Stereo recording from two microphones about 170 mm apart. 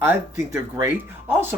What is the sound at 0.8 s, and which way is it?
Speech, 15° right (ahead or behind).